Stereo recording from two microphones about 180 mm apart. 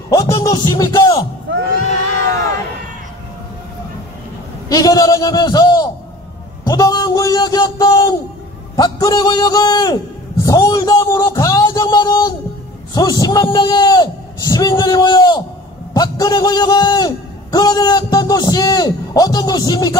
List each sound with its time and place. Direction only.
0.1 s music: 20° left (ahead or behind)
4.6 s a man's voice: 20° left (ahead or behind)
10.4 s a sound: 20° left (ahead or behind)
12.9 s a man's voice: 20° left (ahead or behind)